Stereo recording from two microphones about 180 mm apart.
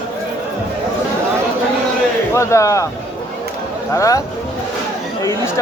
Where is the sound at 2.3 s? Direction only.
15° left (ahead or behind).